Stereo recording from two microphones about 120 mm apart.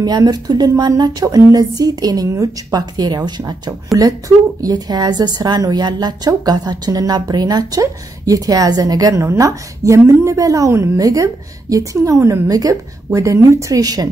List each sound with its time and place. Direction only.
0.0 s a woman's voice: 35° right (ahead or behind)